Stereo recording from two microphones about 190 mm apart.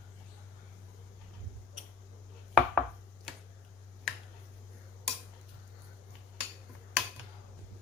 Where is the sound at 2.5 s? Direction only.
Centre (ahead or behind).